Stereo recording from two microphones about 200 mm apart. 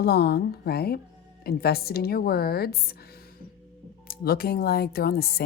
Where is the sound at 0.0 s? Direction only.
55° left (ahead or behind).